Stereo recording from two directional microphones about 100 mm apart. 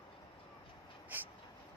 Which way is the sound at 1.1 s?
20° right (ahead or behind).